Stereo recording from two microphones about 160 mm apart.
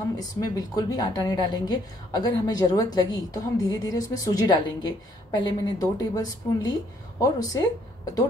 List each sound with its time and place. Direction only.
0.2 s a woman's voice: 25° left (ahead or behind)